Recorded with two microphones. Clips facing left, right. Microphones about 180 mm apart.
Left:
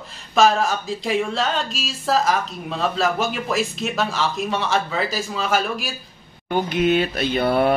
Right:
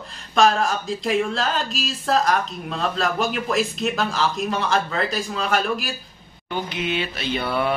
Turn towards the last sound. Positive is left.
turn(degrees=45)  # may be behind; listen again after turning